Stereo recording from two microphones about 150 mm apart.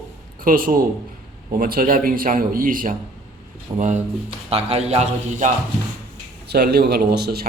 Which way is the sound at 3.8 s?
55° right (ahead or behind).